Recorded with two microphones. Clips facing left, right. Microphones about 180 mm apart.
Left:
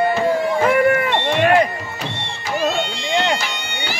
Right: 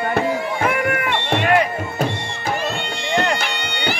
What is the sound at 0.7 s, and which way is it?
Music, 30° left (ahead or behind).